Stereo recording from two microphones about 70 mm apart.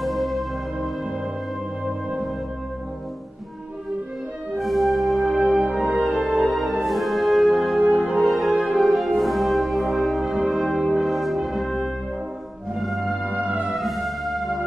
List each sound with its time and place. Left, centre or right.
0.0 s music: centre
1.9 s music: centre
4.6 s music: centre
13.3 s music: centre
13.7 s music: centre